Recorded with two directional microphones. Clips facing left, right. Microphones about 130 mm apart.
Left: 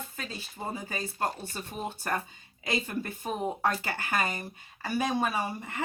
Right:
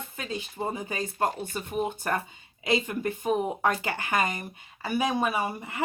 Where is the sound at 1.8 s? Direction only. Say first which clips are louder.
Right 7 dB; 15° right (ahead or behind).